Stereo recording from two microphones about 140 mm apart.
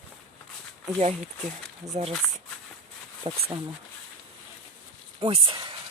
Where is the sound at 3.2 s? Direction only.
45° right (ahead or behind).